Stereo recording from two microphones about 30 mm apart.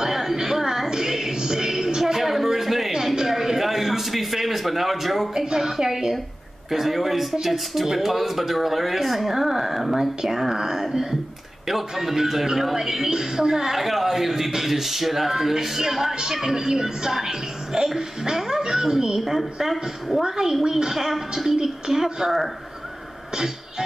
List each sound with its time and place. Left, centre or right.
0.0 s a sound: centre
5.3 s speech: right
13.7 s speech: centre
20.2 s speech: centre
21.5 s speech: right